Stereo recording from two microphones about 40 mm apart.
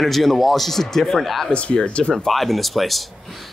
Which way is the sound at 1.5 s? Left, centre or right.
Left.